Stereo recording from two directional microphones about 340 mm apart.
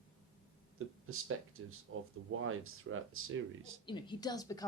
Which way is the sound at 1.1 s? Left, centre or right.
Right.